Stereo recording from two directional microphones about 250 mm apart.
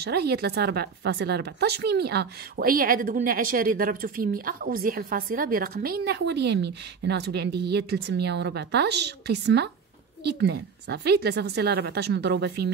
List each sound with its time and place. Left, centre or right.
0.0 s speech: right